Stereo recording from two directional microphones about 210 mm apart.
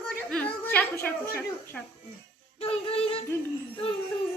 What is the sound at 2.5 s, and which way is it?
Music, 25° left (ahead or behind).